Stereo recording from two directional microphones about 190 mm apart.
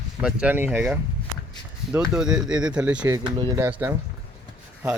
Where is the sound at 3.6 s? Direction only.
10° right (ahead or behind).